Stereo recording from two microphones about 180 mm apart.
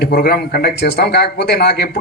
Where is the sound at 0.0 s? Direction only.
60° left (ahead or behind).